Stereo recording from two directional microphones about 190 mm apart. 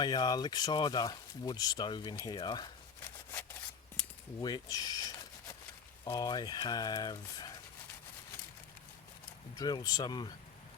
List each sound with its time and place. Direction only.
0.0 s speech: 20° left (ahead or behind)
4.0 s a sound: 5° left (ahead or behind)
4.4 s speech: 20° left (ahead or behind)
9.6 s speech: 20° left (ahead or behind)